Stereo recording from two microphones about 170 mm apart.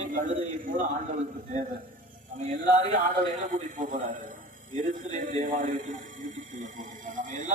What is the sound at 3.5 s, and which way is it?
A man's voice, 50° right (ahead or behind).